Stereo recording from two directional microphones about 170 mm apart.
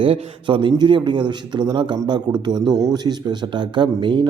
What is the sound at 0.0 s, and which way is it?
A man's voice, 30° right (ahead or behind).